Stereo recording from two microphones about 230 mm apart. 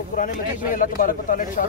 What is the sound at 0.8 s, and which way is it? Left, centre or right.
Speech, left.